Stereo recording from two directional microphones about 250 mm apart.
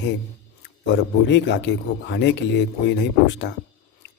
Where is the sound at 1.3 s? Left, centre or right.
Left.